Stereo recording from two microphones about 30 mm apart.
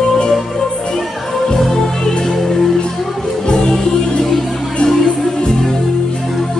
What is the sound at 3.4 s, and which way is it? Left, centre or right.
Music, left.